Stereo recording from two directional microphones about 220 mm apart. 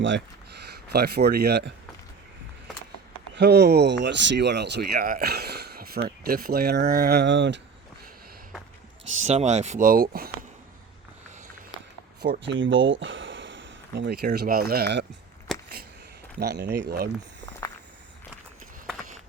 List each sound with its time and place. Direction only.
0.0 s speech: 50° right (ahead or behind)
3.3 s speech: 50° right (ahead or behind)
9.2 s speech: 30° right (ahead or behind)
12.2 s speech: 50° right (ahead or behind)
15.5 s a sound: centre (ahead or behind)
16.4 s speech: 50° right (ahead or behind)